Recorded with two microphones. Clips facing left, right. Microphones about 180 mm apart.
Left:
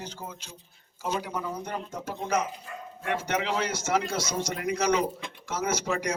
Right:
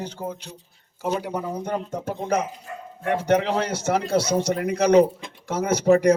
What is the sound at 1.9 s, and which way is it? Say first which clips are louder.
Speech: right 7 dB; 55° right (ahead or behind).